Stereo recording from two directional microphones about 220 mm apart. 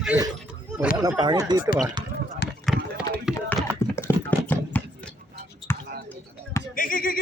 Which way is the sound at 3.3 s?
Centre (ahead or behind).